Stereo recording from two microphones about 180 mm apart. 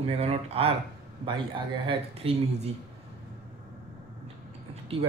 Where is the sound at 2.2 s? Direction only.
30° right (ahead or behind).